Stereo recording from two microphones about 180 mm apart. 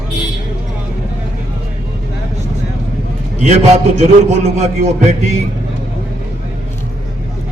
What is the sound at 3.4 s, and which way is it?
A man's voice, 40° right (ahead or behind).